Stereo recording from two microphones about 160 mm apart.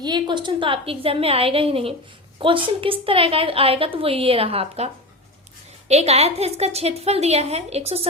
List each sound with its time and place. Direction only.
0.0 s a woman's voice: 30° right (ahead or behind)
5.9 s a woman's voice: 45° right (ahead or behind)